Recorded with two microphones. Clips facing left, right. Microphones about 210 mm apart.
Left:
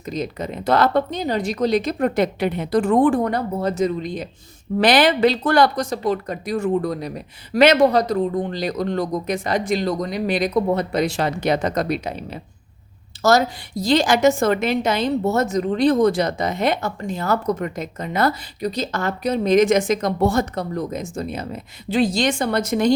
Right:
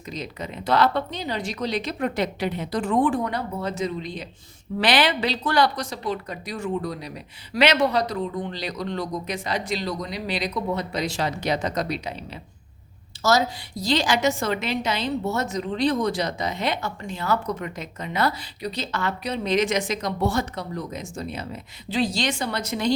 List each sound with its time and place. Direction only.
0.0 s a woman's voice: 45° left (ahead or behind)